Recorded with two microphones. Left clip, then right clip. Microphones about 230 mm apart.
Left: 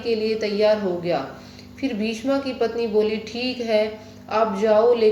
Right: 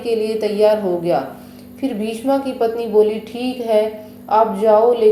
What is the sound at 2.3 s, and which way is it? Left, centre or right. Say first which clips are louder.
A woman's voice: right 6 dB; centre.